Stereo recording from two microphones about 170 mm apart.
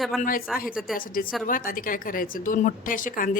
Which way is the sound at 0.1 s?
Centre (ahead or behind).